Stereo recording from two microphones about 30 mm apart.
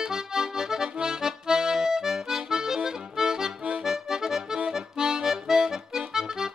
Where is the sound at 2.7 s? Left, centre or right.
Right.